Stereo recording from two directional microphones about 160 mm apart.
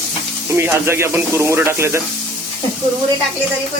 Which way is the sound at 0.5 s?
15° right (ahead or behind).